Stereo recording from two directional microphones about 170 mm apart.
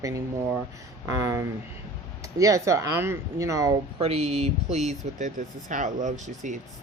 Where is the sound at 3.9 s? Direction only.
35° right (ahead or behind).